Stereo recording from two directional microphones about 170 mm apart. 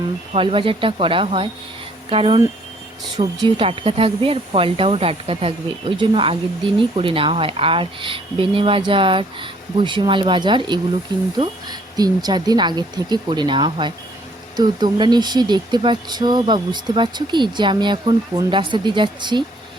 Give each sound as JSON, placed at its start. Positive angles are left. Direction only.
{"t": 0.3, "sound": "speech", "side_deg": -30}